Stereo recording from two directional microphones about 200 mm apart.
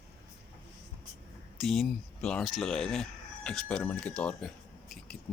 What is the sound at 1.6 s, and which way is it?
Speech, centre (ahead or behind).